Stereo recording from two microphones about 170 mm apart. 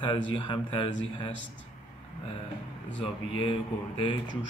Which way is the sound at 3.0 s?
30° left (ahead or behind).